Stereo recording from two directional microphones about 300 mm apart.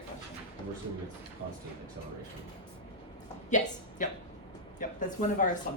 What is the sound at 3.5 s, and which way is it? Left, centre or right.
A woman's voice, left.